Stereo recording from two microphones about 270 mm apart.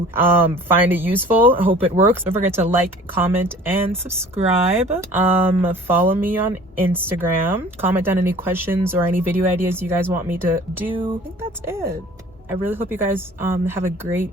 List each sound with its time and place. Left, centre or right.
0.1 s speech: centre
4.4 s speech: right
4.9 s speech: centre